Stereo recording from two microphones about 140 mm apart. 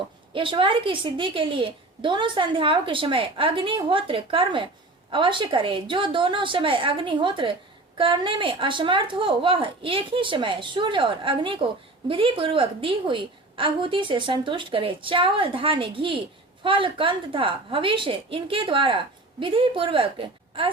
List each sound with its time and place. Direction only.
0.3 s a woman's voice: 40° right (ahead or behind)